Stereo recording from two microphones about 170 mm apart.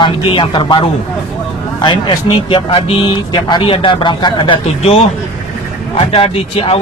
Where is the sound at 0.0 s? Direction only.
30° left (ahead or behind).